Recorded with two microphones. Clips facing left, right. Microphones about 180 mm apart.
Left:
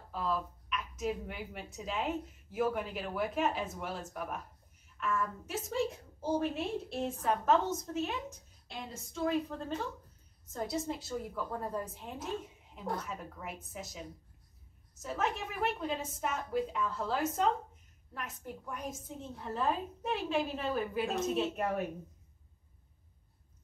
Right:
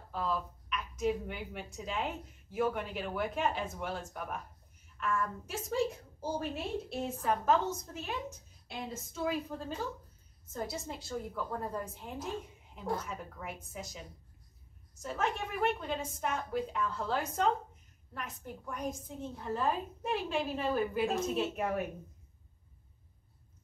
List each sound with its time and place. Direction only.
0.1 s a woman's voice: centre (ahead or behind)
9.2 s a woman's voice: 5° right (ahead or behind)